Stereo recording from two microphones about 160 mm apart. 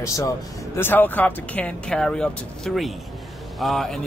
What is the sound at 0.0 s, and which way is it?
A man's voice, 20° left (ahead or behind).